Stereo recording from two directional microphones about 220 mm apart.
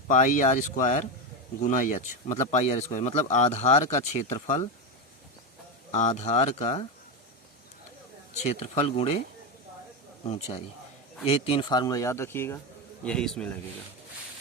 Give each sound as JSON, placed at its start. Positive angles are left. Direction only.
{"t": 0.1, "sound": "speech", "side_deg": 35}
{"t": 5.9, "sound": "speech", "side_deg": 30}
{"t": 8.4, "sound": "speech", "side_deg": 30}
{"t": 10.2, "sound": "a man's voice", "side_deg": 30}